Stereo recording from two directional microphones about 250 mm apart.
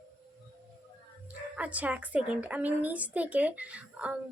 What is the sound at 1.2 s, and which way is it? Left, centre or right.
A woman's voice, centre.